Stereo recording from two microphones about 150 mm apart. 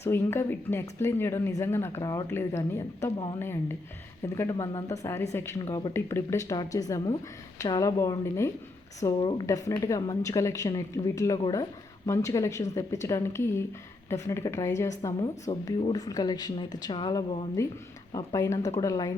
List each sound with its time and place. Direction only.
0.0 s a woman's voice: 15° left (ahead or behind)
9.1 s speech: 35° left (ahead or behind)
9.5 s a woman's voice: 25° left (ahead or behind)
17.6 s a woman's voice: 20° left (ahead or behind)